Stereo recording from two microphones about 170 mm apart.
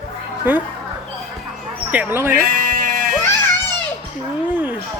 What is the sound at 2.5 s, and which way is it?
Music, 55° right (ahead or behind).